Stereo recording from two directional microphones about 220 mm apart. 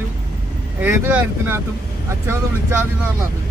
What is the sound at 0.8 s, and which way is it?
Speech, 10° right (ahead or behind).